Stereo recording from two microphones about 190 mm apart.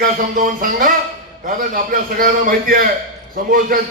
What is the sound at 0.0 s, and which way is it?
A man's voice, 45° right (ahead or behind).